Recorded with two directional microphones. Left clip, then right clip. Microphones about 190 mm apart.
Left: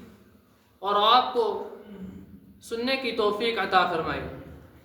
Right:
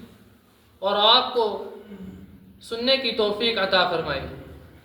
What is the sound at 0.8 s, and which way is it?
Speech, 25° left (ahead or behind).